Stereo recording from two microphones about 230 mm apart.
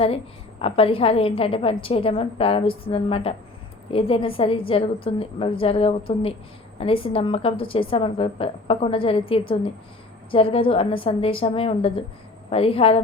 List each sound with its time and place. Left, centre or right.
0.6 s a woman's voice: left